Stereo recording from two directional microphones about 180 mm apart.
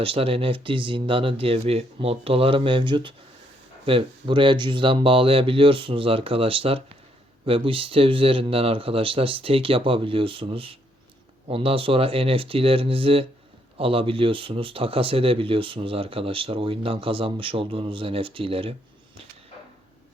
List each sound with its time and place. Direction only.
0.0 s speech: 30° right (ahead or behind)